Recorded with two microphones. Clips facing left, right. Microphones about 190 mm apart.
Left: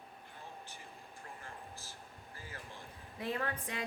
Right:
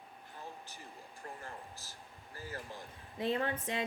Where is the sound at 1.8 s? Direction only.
40° right (ahead or behind).